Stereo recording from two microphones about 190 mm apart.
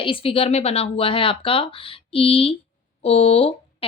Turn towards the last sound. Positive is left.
turn(degrees=30)  # may be behind; listen again after turning